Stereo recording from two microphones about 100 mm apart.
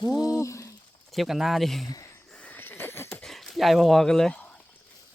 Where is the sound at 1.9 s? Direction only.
30° left (ahead or behind).